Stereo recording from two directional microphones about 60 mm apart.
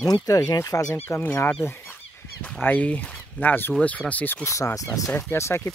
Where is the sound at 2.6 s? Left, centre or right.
Left.